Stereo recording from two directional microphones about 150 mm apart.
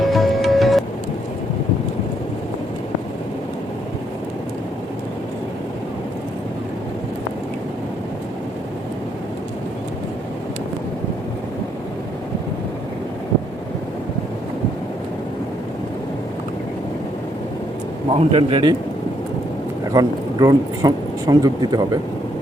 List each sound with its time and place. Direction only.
0.0 s music: centre (ahead or behind)
18.1 s a man's voice: 40° right (ahead or behind)
19.9 s speech: 25° right (ahead or behind)